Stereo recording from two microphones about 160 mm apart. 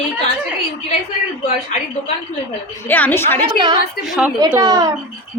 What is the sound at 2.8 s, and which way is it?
Speech, 10° left (ahead or behind).